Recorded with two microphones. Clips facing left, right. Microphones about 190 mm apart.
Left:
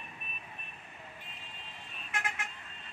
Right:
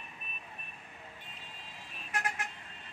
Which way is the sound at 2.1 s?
40° right (ahead or behind).